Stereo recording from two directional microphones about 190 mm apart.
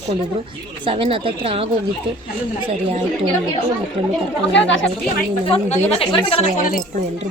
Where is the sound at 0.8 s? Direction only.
30° right (ahead or behind).